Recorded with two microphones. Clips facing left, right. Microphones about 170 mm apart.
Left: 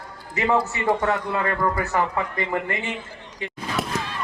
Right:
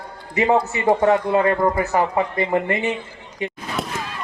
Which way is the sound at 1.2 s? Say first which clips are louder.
Right 7 dB; 35° right (ahead or behind).